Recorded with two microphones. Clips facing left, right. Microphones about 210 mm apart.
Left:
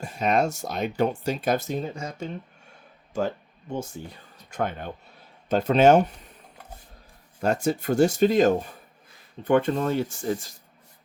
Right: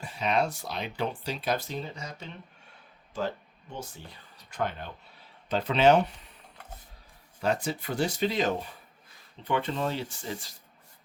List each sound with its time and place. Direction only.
0.0 s speech: 45° left (ahead or behind)
7.4 s speech: 45° left (ahead or behind)